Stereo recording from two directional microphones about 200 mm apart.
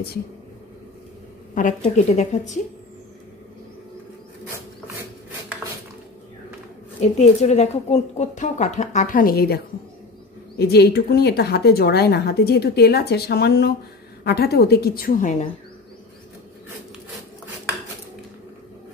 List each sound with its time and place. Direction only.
1.5 s a woman's voice: 40° left (ahead or behind)
7.0 s a woman's voice: 35° left (ahead or behind); by 9.6 s 50° left (ahead or behind)
10.6 s a woman's voice: 55° left (ahead or behind)